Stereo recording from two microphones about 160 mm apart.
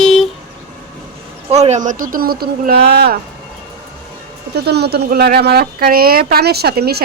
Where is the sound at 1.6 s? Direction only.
50° right (ahead or behind); by 3.2 s 75° right (ahead or behind).